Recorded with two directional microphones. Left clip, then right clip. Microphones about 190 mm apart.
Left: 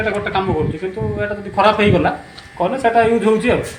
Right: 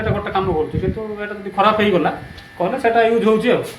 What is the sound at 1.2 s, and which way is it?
Speech, 25° left (ahead or behind).